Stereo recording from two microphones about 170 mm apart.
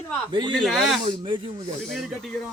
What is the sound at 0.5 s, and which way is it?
A man's voice, centre (ahead or behind).